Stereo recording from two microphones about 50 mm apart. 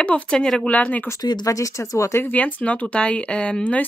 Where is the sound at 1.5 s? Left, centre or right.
Left.